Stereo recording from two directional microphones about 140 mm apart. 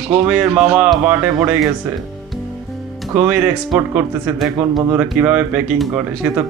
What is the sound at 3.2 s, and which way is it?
Speech, 10° right (ahead or behind).